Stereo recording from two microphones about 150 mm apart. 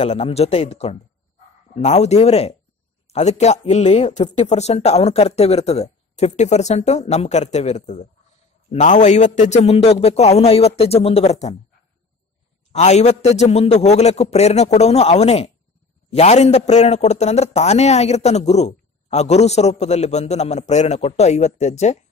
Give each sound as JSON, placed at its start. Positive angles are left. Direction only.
{"t": 0.0, "sound": "a man's voice", "side_deg": 50}
{"t": 12.7, "sound": "a man's voice", "side_deg": 50}